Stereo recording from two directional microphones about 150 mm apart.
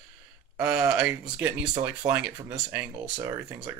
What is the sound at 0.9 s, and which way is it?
Speech, 10° right (ahead or behind).